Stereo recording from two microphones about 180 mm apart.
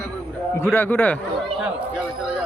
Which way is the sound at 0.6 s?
10° left (ahead or behind).